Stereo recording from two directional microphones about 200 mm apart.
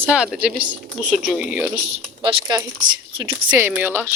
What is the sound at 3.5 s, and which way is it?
Speech, 10° right (ahead or behind).